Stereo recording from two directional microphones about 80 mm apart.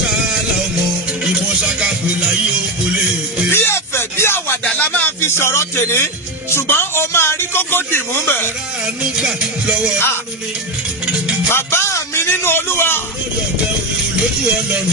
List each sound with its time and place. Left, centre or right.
1.2 s music: centre
3.5 s a sound: left
4.7 s music: centre
5.4 s a man's voice: left
8.8 s music: centre
11.4 s music: left